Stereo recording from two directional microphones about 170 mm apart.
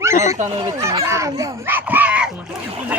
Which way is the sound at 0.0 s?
15° right (ahead or behind).